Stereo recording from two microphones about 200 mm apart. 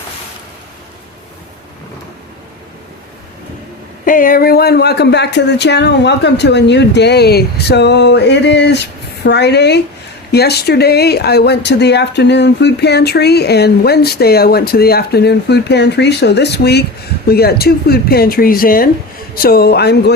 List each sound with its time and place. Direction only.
4.0 s speech: 40° left (ahead or behind)